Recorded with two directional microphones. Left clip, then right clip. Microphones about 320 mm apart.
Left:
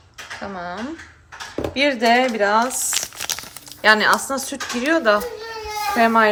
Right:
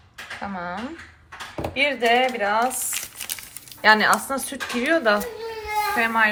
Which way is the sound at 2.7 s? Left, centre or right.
Left.